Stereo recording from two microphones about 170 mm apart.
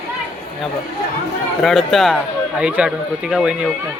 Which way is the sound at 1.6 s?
Centre (ahead or behind).